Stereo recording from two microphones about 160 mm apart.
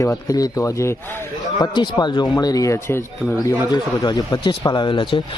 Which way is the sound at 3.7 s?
25° left (ahead or behind).